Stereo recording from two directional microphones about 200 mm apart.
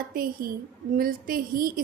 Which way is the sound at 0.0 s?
45° right (ahead or behind).